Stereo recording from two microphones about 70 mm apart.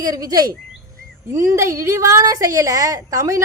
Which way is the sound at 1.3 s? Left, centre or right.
Right.